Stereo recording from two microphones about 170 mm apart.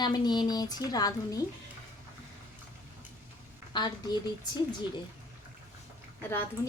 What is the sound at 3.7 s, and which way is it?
A woman's voice, 25° left (ahead or behind).